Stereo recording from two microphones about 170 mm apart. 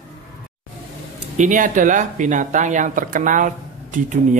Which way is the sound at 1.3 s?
50° right (ahead or behind).